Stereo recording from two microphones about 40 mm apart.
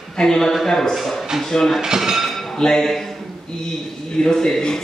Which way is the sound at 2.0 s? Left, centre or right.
Centre.